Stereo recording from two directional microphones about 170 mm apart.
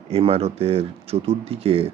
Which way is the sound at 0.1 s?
35° right (ahead or behind).